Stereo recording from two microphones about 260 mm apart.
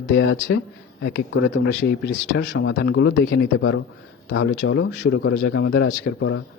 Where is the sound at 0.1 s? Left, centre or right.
Left.